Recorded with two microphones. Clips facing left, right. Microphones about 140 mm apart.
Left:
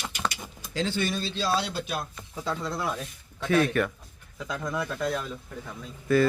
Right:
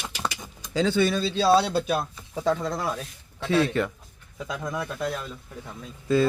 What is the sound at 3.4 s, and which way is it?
Speech, 25° right (ahead or behind).